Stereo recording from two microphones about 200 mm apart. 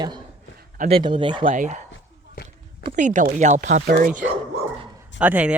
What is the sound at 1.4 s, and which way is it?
Speech, 40° right (ahead or behind).